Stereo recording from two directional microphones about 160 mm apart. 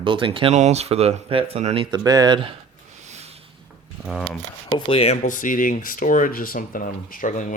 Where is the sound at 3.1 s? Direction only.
45° right (ahead or behind).